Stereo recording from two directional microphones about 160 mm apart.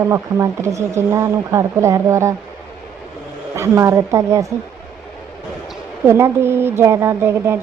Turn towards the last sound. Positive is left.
turn(degrees=-15)  # may be behind; listen again after turning